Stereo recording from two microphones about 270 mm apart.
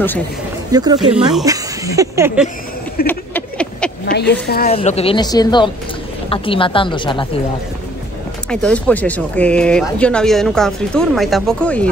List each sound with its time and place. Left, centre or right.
0.7 s speech: centre
3.1 s a sound: centre
4.1 s a woman's voice: left
4.6 s a woman's voice: left
8.5 s speech: centre